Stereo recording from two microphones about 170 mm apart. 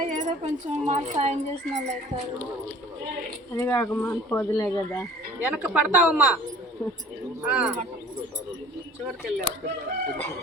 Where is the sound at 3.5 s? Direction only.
15° left (ahead or behind).